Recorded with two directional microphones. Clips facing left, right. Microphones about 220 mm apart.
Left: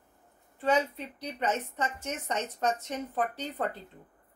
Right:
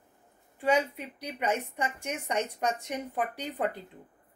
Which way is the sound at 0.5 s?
10° right (ahead or behind).